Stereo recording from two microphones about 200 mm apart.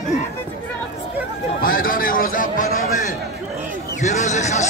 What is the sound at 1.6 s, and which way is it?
A man's voice, 45° left (ahead or behind).